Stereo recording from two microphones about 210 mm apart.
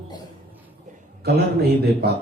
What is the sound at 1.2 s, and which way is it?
Speech, 50° right (ahead or behind).